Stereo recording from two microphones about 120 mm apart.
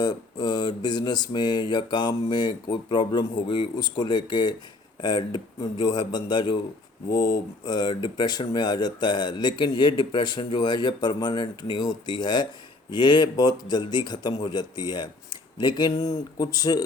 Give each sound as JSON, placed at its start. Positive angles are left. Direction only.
{"t": 0.0, "sound": "speech", "side_deg": 35}